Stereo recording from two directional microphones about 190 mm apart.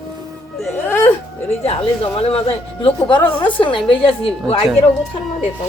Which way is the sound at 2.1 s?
30° left (ahead or behind).